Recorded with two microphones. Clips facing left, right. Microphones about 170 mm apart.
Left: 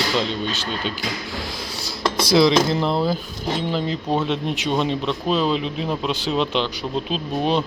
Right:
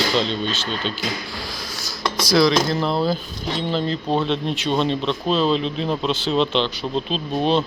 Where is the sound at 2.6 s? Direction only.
20° left (ahead or behind).